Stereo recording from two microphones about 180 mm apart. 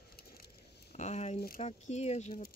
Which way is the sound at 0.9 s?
40° left (ahead or behind).